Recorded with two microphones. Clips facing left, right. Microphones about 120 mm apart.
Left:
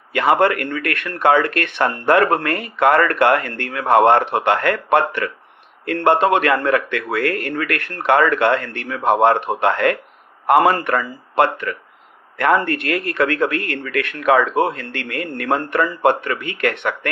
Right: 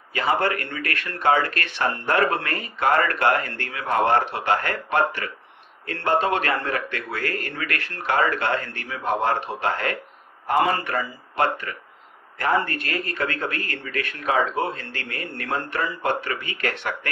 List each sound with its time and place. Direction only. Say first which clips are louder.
0.1 s speech: left 7 dB; 60° left (ahead or behind)